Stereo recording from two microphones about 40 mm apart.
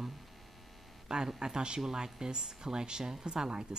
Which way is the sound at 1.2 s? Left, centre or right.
Centre.